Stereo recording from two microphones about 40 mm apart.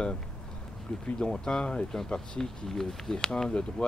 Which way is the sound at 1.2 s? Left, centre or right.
Left.